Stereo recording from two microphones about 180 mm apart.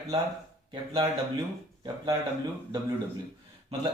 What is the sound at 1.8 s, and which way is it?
Speech, 25° right (ahead or behind).